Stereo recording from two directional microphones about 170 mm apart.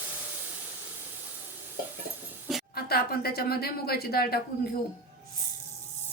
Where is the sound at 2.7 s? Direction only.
65° left (ahead or behind).